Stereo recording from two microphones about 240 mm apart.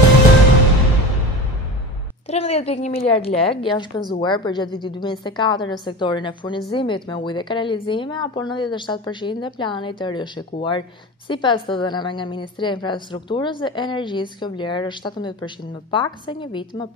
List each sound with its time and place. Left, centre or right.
2.2 s a woman's voice: left